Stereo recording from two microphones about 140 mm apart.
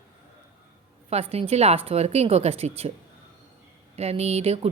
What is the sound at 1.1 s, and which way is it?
A woman's voice, 45° right (ahead or behind).